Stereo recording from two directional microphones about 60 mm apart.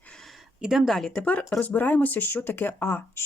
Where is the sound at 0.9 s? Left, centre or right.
Centre.